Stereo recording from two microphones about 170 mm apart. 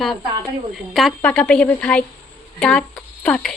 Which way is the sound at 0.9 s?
Centre (ahead or behind).